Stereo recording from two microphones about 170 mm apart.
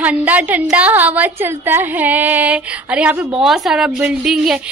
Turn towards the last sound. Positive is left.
turn(degrees=-5)  # may be behind; listen again after turning